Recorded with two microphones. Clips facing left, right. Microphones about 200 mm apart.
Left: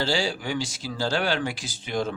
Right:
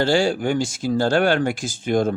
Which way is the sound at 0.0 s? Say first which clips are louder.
Right 8 dB; 50° right (ahead or behind).